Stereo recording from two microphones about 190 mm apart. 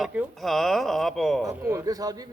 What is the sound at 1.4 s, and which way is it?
Speech, 15° right (ahead or behind).